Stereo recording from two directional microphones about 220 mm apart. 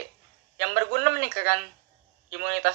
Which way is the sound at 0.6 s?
45° right (ahead or behind).